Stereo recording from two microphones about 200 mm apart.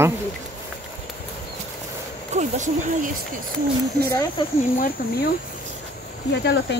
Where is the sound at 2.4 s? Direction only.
40° right (ahead or behind).